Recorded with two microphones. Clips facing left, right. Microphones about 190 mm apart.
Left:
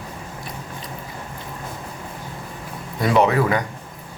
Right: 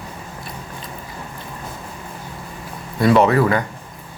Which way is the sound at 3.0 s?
15° left (ahead or behind).